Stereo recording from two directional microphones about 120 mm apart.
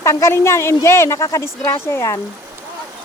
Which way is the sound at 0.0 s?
25° left (ahead or behind).